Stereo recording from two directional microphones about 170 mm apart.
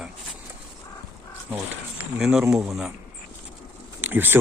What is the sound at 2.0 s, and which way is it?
Speech, 5° right (ahead or behind).